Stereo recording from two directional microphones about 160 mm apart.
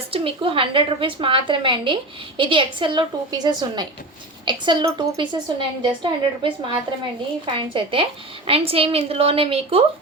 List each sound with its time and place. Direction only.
0.1 s a woman's voice: 35° right (ahead or behind)